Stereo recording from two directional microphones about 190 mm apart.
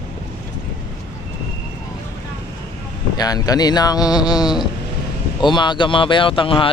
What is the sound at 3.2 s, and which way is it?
Speech, 20° left (ahead or behind).